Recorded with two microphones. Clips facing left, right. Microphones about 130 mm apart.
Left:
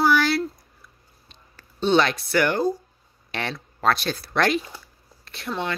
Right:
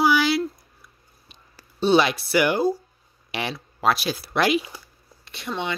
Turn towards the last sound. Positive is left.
turn(degrees=0)  # may be behind; listen again after turning